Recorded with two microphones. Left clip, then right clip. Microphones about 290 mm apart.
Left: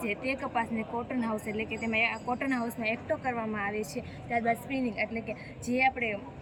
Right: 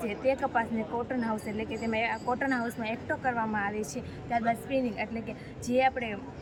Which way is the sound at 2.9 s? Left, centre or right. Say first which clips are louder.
Right 1 dB; right.